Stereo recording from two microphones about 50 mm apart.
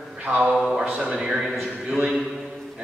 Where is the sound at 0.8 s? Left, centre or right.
Centre.